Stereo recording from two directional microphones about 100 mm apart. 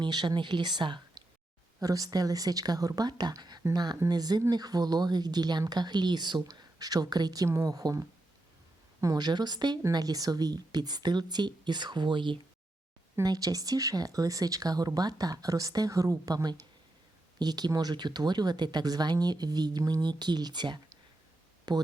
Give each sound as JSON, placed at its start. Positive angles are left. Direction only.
{"t": 0.0, "sound": "speech", "side_deg": -50}
{"t": 1.8, "sound": "speech", "side_deg": -35}
{"t": 13.2, "sound": "speech", "side_deg": -35}